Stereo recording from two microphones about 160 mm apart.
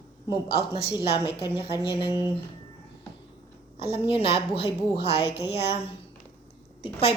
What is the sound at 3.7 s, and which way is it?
A woman's voice, 35° left (ahead or behind).